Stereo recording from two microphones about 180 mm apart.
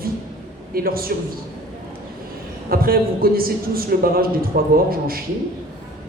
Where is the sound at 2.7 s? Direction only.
55° right (ahead or behind).